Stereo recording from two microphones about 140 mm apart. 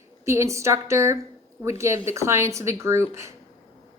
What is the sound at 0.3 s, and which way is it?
A woman's voice, 20° right (ahead or behind).